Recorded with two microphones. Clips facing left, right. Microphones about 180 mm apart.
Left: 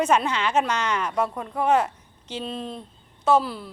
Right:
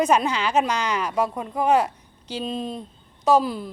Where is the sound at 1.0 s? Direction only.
10° right (ahead or behind).